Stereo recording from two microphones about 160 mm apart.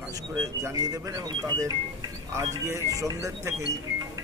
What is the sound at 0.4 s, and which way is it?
Speech, 20° right (ahead or behind).